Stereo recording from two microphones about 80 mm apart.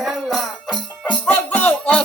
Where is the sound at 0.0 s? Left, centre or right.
Centre.